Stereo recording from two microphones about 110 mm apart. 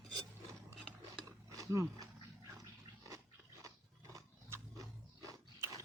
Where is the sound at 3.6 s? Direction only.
30° right (ahead or behind).